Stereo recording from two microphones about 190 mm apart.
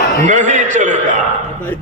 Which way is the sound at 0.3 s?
40° right (ahead or behind).